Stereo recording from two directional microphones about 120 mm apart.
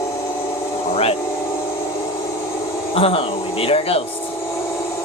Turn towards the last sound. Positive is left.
turn(degrees=55)  # may be behind; listen again after turning